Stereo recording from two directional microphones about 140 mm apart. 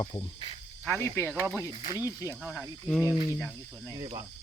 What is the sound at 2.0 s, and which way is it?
Speech, 25° left (ahead or behind).